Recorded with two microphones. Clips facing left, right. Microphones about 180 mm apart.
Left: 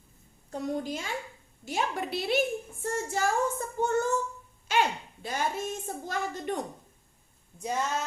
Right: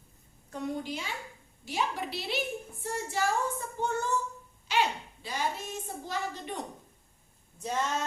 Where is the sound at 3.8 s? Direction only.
45° left (ahead or behind).